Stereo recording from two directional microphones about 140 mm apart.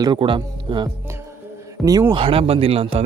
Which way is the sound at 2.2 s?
40° right (ahead or behind).